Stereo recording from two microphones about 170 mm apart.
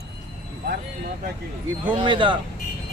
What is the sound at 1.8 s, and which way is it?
Speech, 30° right (ahead or behind).